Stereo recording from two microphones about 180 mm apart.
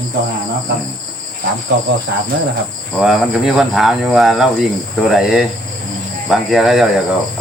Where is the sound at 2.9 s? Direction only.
Centre (ahead or behind).